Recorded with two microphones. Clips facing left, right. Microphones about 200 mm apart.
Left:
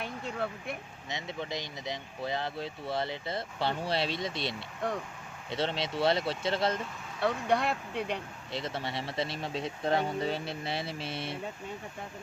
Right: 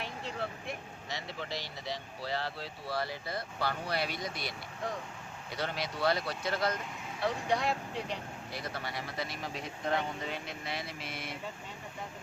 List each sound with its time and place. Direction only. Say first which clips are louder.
1.1 s speech: left 3 dB; 20° left (ahead or behind)
7.2 s speech: left 3 dB; 60° left (ahead or behind)
8.5 s speech: left 5 dB; 25° left (ahead or behind)